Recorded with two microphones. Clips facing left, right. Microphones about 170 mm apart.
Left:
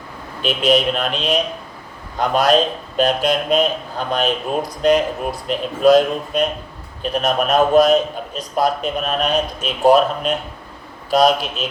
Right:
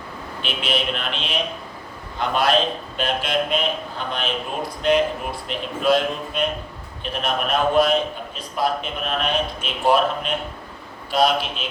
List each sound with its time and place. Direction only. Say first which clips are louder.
0.4 s a man's voice: left 9 dB; 40° left (ahead or behind)